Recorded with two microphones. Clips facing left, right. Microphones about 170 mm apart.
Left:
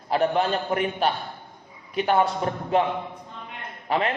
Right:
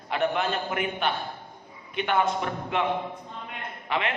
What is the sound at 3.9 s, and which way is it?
Speech, 40° left (ahead or behind).